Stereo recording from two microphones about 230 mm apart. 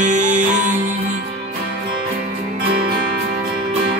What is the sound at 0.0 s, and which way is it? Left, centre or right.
Music, right.